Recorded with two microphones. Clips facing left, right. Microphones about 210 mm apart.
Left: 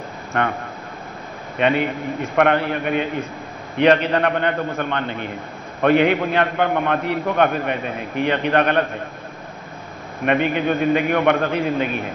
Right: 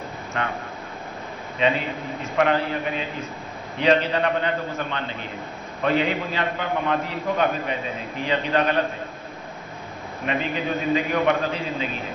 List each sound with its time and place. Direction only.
0.3 s a man's voice: 60° left (ahead or behind)
1.6 s a man's voice: 65° left (ahead or behind)
10.2 s a man's voice: 60° left (ahead or behind)